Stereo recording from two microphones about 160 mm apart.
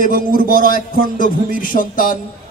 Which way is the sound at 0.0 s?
65° right (ahead or behind).